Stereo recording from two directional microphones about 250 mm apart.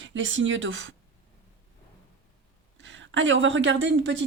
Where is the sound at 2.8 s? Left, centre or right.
Right.